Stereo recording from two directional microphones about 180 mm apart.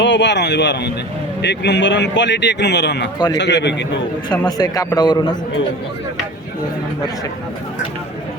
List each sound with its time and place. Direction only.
0.0 s a man's voice: 80° left
4.3 s a man's voice: 20° left (ahead or behind)